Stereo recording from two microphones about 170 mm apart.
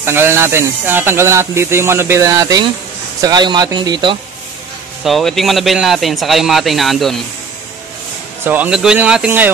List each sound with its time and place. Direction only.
0.0 s speech: 15° right (ahead or behind)
5.0 s a man's voice: centre (ahead or behind)
8.5 s speech: 5° right (ahead or behind)